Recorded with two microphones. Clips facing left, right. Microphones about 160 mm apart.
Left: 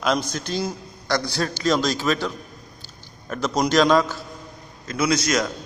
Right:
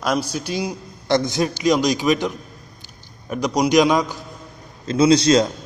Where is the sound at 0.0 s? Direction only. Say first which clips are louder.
Right 1 dB; 10° right (ahead or behind).